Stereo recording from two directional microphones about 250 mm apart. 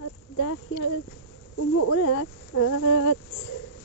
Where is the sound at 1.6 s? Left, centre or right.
Left.